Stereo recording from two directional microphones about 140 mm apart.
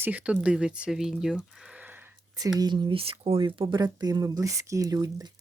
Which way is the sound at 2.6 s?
30° right (ahead or behind).